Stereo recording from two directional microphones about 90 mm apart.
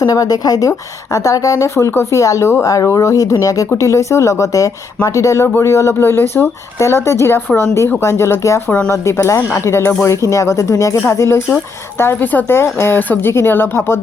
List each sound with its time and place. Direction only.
0.0 s a woman's voice: 40° left (ahead or behind)